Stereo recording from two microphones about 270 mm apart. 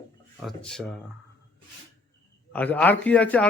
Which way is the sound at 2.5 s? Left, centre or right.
Centre.